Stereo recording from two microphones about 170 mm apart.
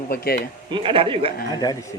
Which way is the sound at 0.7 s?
30° right (ahead or behind).